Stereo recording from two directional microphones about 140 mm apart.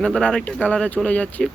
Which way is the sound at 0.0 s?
5° left (ahead or behind).